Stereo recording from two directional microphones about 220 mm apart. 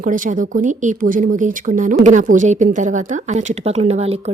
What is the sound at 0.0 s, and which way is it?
Speech, 35° right (ahead or behind).